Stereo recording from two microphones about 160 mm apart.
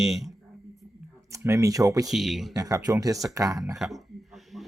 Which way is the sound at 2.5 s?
20° right (ahead or behind).